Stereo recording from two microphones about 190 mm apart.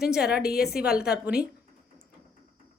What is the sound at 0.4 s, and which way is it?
Speech, 55° left (ahead or behind).